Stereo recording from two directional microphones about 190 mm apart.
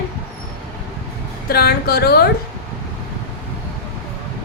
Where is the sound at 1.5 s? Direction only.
55° left (ahead or behind).